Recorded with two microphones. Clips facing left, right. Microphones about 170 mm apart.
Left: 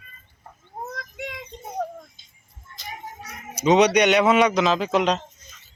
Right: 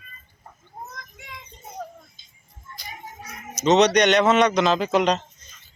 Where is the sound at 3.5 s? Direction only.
10° left (ahead or behind).